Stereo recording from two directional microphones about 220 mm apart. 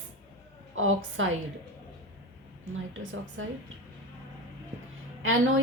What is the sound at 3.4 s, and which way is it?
Speech, 65° right (ahead or behind).